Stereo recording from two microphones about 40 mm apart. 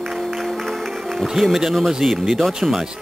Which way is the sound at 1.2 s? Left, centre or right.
Centre.